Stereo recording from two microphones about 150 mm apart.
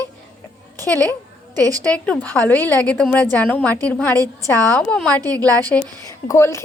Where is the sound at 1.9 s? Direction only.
10° left (ahead or behind).